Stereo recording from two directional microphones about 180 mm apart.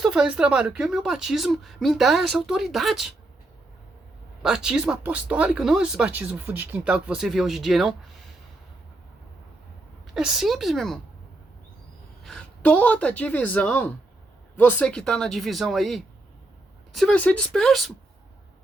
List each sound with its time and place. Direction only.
0.0 s speech: 5° right (ahead or behind)
4.4 s speech: 5° right (ahead or behind)
10.2 s speech: 5° right (ahead or behind)
12.2 s speech: 5° left (ahead or behind)